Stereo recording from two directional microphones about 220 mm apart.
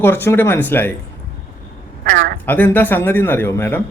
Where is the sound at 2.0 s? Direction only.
45° right (ahead or behind).